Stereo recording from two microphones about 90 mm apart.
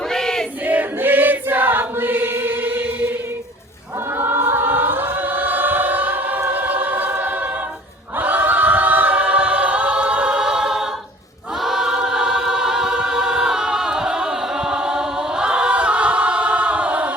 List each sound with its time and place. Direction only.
0.1 s battle cry: 5° left (ahead or behind)
0.6 s choir: 20° right (ahead or behind)
4.2 s choir: 25° right (ahead or behind)